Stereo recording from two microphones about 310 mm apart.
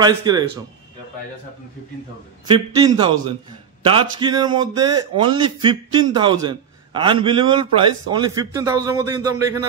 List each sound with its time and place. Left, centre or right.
0.0 s a man's voice: centre
2.4 s a man's voice: centre